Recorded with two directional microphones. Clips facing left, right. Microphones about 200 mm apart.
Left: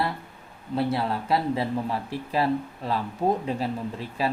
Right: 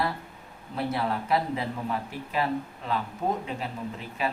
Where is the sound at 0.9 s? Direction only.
30° left (ahead or behind).